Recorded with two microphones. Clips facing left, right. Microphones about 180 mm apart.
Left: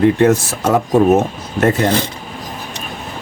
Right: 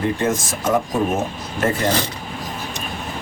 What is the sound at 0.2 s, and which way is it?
Speech, 70° left (ahead or behind).